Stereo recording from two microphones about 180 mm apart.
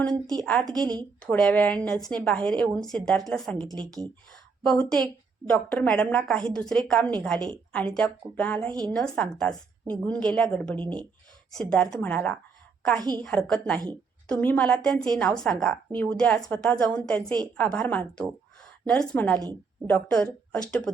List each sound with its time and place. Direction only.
0.4 s a woman's voice: 10° left (ahead or behind)
4.6 s a woman's voice: 5° left (ahead or behind)
13.0 s a woman's voice: 25° right (ahead or behind)
13.2 s a woman's voice: 5° left (ahead or behind)